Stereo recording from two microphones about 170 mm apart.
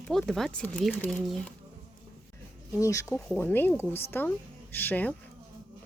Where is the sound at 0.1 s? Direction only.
Centre (ahead or behind).